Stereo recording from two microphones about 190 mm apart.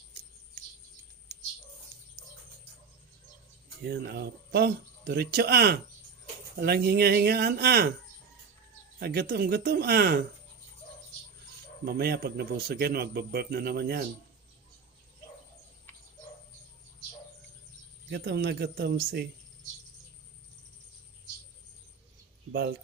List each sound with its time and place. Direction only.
1.3 s bird: 15° right (ahead or behind)
3.8 s speech: 60° right (ahead or behind)
9.0 s speech: 55° right (ahead or behind)
11.9 s speech: 55° right (ahead or behind)
18.1 s speech: 60° right (ahead or behind)